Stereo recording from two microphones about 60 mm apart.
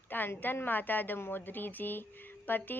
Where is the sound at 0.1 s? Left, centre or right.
Left.